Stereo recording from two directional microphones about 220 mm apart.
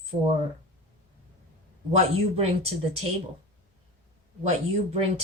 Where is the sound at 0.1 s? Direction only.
30° right (ahead or behind).